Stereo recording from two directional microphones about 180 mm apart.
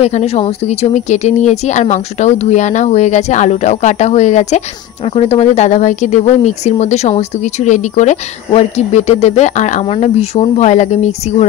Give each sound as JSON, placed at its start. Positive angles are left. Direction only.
{"t": 0.0, "sound": "speech", "side_deg": 35}